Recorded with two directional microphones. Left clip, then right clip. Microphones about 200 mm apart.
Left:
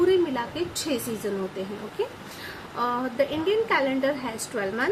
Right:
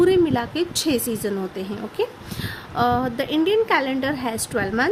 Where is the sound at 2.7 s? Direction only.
55° right (ahead or behind).